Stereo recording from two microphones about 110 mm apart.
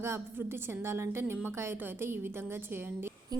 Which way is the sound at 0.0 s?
20° right (ahead or behind).